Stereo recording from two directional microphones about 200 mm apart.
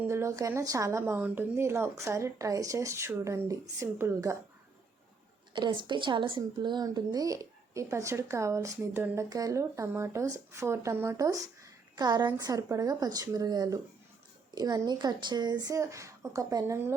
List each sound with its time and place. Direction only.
0.0 s speech: 15° right (ahead or behind)
5.5 s speech: 25° right (ahead or behind)